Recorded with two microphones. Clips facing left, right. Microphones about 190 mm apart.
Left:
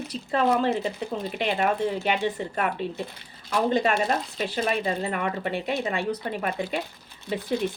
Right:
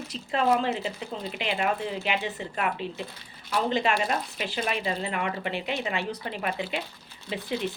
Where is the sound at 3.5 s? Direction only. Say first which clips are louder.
Left 3 dB; 50° left (ahead or behind).